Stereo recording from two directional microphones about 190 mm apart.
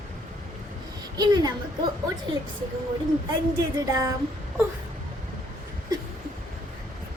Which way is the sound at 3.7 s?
20° right (ahead or behind).